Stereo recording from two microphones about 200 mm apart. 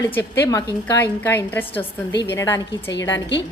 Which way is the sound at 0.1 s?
10° left (ahead or behind).